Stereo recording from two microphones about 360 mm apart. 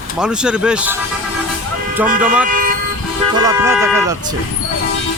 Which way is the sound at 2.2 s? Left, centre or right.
Centre.